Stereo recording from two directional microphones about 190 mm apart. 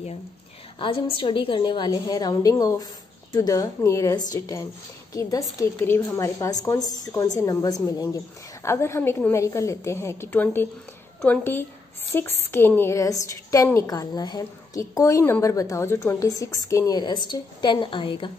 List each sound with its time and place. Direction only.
0.7 s a woman's voice: 30° left (ahead or behind)